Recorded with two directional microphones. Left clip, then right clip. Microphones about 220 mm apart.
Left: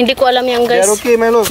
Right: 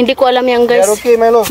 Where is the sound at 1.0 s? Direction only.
25° right (ahead or behind).